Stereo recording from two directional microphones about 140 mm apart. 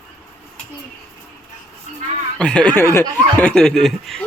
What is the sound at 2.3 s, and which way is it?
Speech, 5° left (ahead or behind).